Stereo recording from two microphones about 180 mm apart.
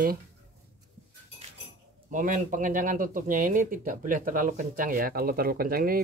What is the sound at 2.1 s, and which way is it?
Speech, 45° right (ahead or behind).